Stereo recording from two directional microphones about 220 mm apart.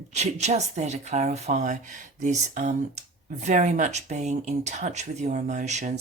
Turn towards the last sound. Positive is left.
turn(degrees=-30)  # may be behind; listen again after turning